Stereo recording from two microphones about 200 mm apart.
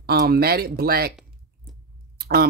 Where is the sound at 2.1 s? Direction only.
50° right (ahead or behind).